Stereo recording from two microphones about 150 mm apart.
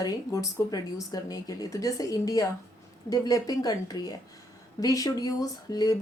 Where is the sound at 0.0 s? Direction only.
25° left (ahead or behind).